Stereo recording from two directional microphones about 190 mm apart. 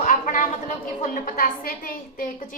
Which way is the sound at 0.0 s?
40° left (ahead or behind).